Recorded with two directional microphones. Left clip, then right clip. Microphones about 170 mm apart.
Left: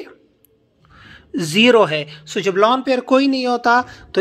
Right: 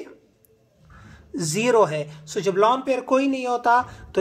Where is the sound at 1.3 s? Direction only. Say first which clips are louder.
Left 7 dB; 25° left (ahead or behind).